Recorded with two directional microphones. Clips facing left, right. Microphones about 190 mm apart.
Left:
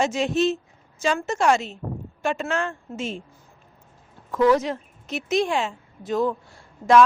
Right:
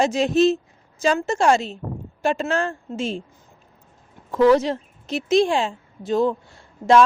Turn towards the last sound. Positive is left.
turn(degrees=-25)  # may be behind; listen again after turning